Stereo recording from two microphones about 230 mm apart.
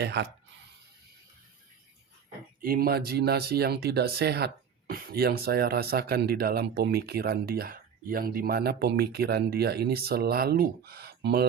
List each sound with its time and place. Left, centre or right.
0.0 s speech: right
2.6 s speech: right